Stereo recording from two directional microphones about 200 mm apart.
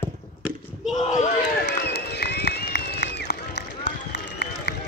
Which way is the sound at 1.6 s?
55° left (ahead or behind).